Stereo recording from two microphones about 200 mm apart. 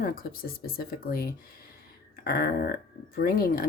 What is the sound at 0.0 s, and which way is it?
Speech, 50° left (ahead or behind).